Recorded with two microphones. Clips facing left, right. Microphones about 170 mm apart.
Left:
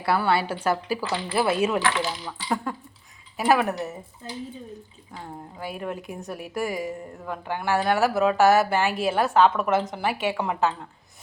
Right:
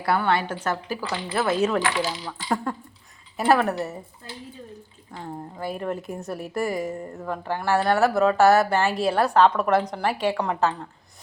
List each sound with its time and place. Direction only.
0.0 s a woman's voice: 5° left (ahead or behind)
5.1 s a woman's voice: 5° left (ahead or behind)